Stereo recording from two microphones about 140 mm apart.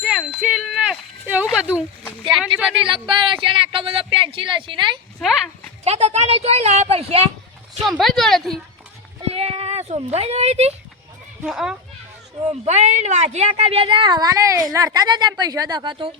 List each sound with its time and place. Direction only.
0.0 s a sound: 5° right (ahead or behind)
2.4 s a woman's voice: 10° right (ahead or behind)
2.8 s a woman's voice: 35° right (ahead or behind)
5.8 s a woman's voice: 50° right (ahead or behind)
7.8 s speech: centre (ahead or behind)
9.3 s speech: 45° right (ahead or behind)
11.4 s speech: 5° right (ahead or behind)
12.5 s a woman's voice: 55° right (ahead or behind); by 16.1 s 35° right (ahead or behind)